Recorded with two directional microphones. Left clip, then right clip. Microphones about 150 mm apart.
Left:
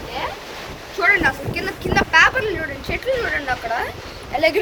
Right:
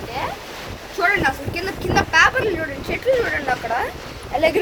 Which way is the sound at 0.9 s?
50° right (ahead or behind).